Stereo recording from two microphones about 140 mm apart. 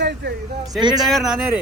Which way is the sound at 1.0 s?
Centre (ahead or behind).